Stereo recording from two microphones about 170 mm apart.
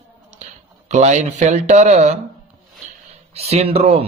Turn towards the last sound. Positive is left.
turn(degrees=-35)  # may be behind; listen again after turning